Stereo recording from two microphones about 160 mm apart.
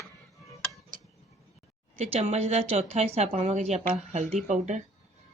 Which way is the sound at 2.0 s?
45° right (ahead or behind).